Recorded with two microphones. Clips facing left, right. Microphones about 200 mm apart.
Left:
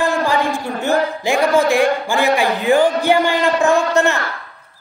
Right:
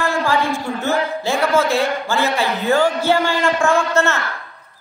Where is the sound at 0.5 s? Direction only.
15° left (ahead or behind).